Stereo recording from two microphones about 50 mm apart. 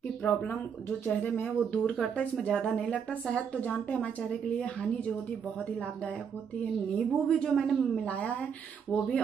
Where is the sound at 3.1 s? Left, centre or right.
Left.